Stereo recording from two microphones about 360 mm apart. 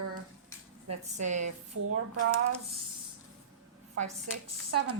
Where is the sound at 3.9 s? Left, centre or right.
Right.